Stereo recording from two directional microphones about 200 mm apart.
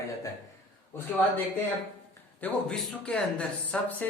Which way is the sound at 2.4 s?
5° left (ahead or behind).